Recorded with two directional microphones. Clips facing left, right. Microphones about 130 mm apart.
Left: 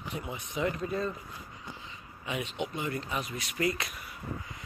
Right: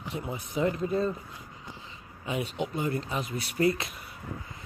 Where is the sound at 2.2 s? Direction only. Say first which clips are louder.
Right 3 dB; 35° right (ahead or behind).